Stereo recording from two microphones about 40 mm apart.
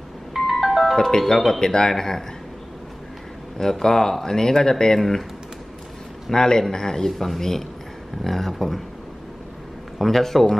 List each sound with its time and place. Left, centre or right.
0.4 s music: centre
0.9 s speech: centre
3.5 s speech: centre
6.3 s a man's voice: centre
9.9 s a man's voice: centre